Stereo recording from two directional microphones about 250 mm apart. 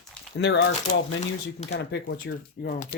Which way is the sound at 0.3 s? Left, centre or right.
Left.